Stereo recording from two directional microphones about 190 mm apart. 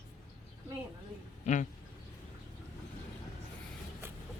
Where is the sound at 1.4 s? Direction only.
40° left (ahead or behind).